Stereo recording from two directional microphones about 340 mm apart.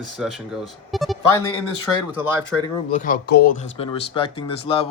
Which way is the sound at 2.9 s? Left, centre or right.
Left.